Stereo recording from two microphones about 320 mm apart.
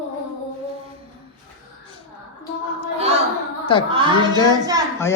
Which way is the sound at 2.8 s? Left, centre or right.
Centre.